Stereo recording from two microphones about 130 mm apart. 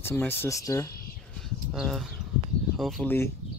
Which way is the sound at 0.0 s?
15° left (ahead or behind).